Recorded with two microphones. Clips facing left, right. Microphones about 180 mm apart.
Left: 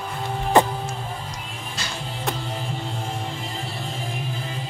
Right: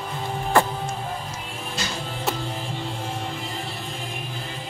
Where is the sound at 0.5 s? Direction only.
20° left (ahead or behind).